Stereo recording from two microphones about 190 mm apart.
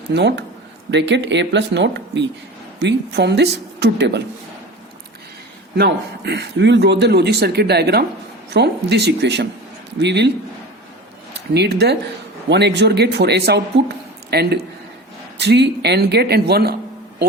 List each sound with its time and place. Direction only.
0.1 s speech: 65° right (ahead or behind)
5.7 s speech: 60° right (ahead or behind)
11.5 s speech: 60° right (ahead or behind)